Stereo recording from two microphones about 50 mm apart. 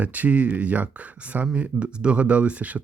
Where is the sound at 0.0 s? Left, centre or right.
Right.